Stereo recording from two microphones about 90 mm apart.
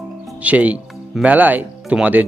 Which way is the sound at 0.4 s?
15° right (ahead or behind).